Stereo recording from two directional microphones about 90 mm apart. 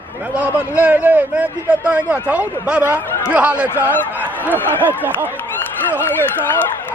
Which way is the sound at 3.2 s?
15° right (ahead or behind).